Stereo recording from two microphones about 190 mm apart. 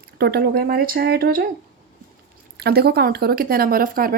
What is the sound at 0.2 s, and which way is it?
Speech, 55° right (ahead or behind).